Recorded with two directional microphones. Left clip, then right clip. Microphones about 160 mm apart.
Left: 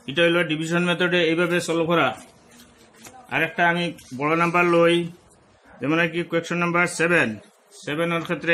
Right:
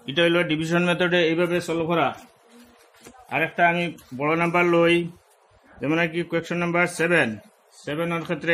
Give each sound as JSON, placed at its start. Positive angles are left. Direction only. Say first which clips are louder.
{"t": 0.0, "sound": "a man's voice", "louder": "left 1 dB", "side_deg": -30}
{"t": 1.7, "sound": "speech", "louder": "left 2 dB", "side_deg": 0}
{"t": 3.3, "sound": "speech", "louder": "even", "side_deg": -10}